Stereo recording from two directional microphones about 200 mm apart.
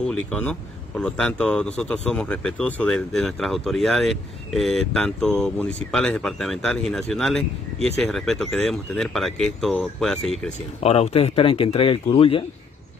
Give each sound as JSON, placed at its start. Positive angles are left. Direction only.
{"t": 0.0, "sound": "speech", "side_deg": 5}
{"t": 10.8, "sound": "speech", "side_deg": 30}